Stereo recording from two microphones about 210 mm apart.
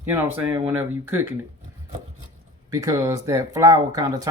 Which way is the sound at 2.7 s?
15° right (ahead or behind).